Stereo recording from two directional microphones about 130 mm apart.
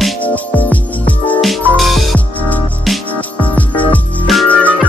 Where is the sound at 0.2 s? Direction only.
10° left (ahead or behind).